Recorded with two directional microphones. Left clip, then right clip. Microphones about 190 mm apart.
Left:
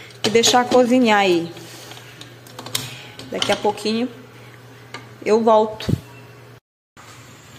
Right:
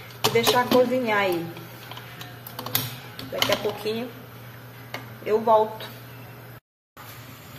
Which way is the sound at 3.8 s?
60° left (ahead or behind).